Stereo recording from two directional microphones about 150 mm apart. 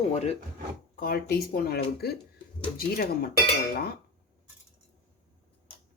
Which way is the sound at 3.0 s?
80° left.